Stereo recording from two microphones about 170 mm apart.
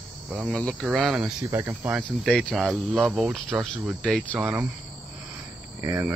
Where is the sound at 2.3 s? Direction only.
5° left (ahead or behind).